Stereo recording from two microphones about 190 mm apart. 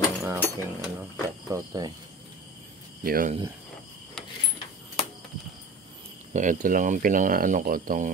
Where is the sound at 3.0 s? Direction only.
50° right (ahead or behind).